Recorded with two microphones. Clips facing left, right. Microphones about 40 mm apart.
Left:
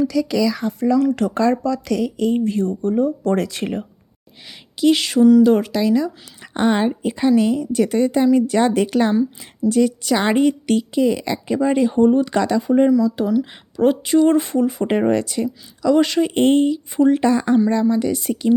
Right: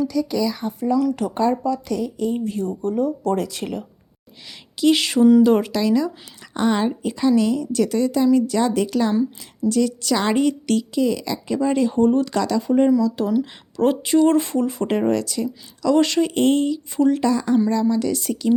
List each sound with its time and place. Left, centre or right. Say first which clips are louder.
0.6 s speech: left 3 dB; left
2.3 s speech: left 5 dB; left
3.3 s speech: left 3 dB; left
4.4 s speech: left 1 dB; centre
6.4 s a woman's voice: left 2 dB; left
9.4 s a woman's voice: left 3 dB; left
12.6 s speech: left 1 dB; centre
14.8 s a woman's voice: left 2 dB; left
15.8 s speech: left 1 dB; centre
16.2 s a woman's voice: left 3 dB; left
17.1 s speech: left 3 dB; left
17.8 s a woman's voice: left 2 dB; centre